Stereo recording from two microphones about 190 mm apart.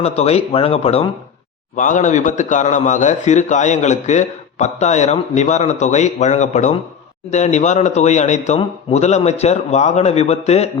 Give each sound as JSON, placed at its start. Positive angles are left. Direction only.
{"t": 0.0, "sound": "a man's voice", "side_deg": 35}
{"t": 1.7, "sound": "a man's voice", "side_deg": 40}